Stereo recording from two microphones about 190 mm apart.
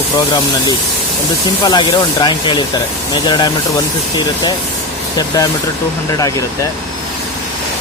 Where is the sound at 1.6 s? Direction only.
25° left (ahead or behind).